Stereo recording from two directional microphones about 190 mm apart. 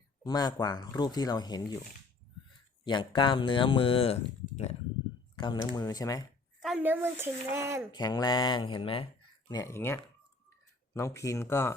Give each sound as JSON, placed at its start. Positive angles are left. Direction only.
{"t": 0.3, "sound": "speech", "side_deg": 20}
{"t": 2.8, "sound": "speech", "side_deg": 25}
{"t": 5.4, "sound": "speech", "side_deg": 25}
{"t": 6.6, "sound": "speech", "side_deg": -5}
{"t": 7.9, "sound": "speech", "side_deg": 20}
{"t": 9.5, "sound": "speech", "side_deg": 15}